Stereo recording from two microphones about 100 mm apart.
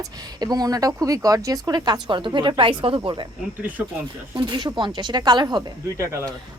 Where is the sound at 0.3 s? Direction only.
40° right (ahead or behind); by 3.2 s 55° right (ahead or behind).